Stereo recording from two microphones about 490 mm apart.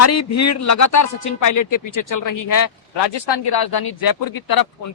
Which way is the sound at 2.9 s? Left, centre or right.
Left.